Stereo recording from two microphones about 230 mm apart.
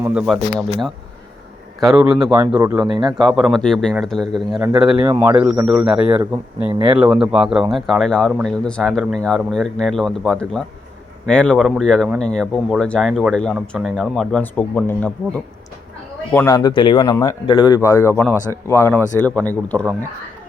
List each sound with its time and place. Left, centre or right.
0.0 s speech: centre
1.8 s speech: centre
2.6 s speech: centre
3.2 s speech: centre
5.0 s speech: centre
5.4 s speech: centre
6.7 s speech: right
6.9 s speech: centre
16.3 s speech: centre